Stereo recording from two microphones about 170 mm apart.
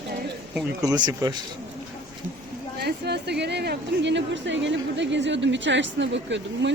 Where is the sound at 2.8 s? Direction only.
75° right (ahead or behind).